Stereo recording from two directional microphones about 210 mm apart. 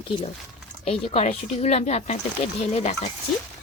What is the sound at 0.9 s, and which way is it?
Speech, 30° left (ahead or behind).